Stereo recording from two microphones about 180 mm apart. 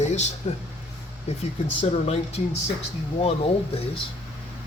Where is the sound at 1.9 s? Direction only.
35° left (ahead or behind).